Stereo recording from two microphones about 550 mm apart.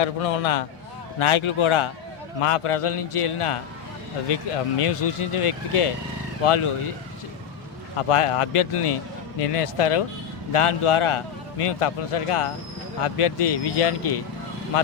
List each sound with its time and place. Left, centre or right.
0.0 s a man's voice: left
1.2 s a man's voice: left
4.8 s a man's voice: left
7.9 s a man's voice: left